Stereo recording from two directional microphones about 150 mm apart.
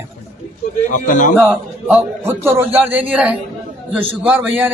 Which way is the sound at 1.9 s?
15° right (ahead or behind).